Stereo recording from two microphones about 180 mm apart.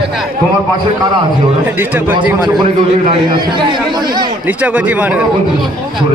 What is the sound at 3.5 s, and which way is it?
Speech, 25° right (ahead or behind).